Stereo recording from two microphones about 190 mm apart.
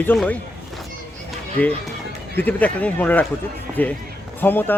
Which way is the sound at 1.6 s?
10° left (ahead or behind).